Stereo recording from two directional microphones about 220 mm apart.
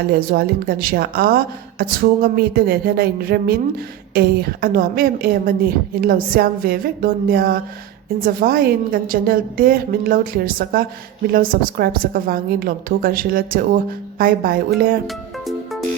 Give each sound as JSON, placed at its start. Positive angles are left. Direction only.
{"t": 0.1, "sound": "a woman's voice", "side_deg": -45}
{"t": 15.0, "sound": "music", "side_deg": 0}